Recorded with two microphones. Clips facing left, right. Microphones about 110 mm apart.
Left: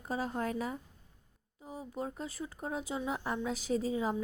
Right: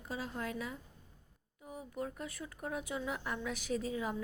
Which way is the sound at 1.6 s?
30° left (ahead or behind).